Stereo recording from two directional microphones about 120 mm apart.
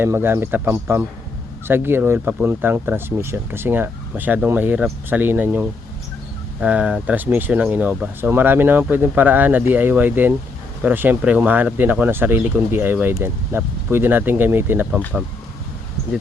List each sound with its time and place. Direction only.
0.0 s speech: 20° right (ahead or behind)